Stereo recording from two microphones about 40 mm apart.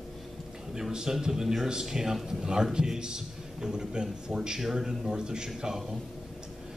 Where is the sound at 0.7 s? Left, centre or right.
Centre.